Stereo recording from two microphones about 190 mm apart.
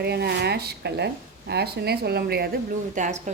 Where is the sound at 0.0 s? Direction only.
60° right (ahead or behind).